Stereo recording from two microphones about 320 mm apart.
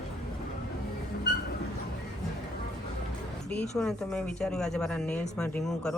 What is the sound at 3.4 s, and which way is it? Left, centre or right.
A woman's voice, centre.